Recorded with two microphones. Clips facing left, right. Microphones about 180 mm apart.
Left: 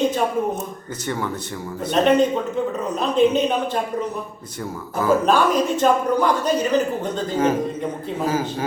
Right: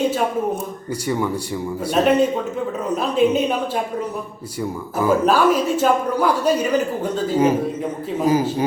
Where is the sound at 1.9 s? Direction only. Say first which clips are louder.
Even; 5° right (ahead or behind).